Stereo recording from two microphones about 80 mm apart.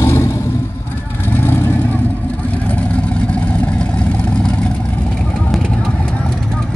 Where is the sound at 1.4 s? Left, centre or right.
Left.